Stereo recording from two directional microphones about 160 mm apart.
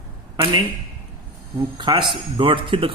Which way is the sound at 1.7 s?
30° right (ahead or behind).